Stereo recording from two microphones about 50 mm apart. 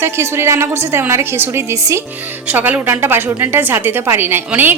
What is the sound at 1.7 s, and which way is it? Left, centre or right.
Speech, right.